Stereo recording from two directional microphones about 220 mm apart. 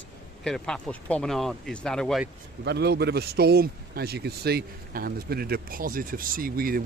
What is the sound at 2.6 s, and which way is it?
A man's voice, 50° right (ahead or behind).